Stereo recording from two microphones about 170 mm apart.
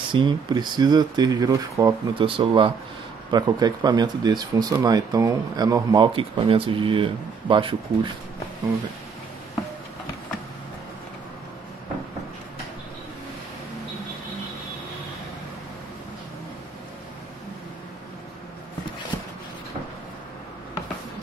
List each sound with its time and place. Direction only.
0.1 s speech: 30° right (ahead or behind)